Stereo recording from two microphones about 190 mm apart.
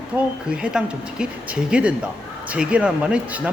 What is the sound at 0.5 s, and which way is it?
Speech, 5° right (ahead or behind).